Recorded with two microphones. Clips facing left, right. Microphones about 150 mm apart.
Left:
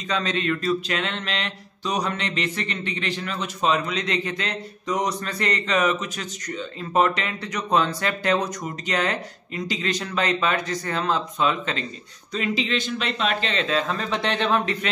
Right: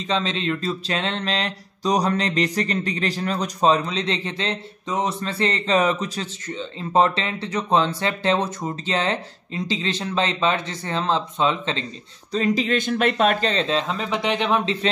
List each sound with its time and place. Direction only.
0.1 s mantra: 25° right (ahead or behind)
12.3 s speech: 40° right (ahead or behind); by 14.8 s 15° right (ahead or behind)